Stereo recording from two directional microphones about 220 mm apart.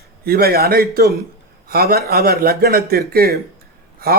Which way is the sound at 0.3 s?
45° right (ahead or behind).